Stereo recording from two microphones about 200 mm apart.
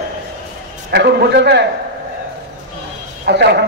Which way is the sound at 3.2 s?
55° right (ahead or behind).